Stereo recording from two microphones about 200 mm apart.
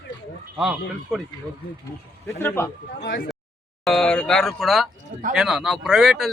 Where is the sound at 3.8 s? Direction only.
Centre (ahead or behind).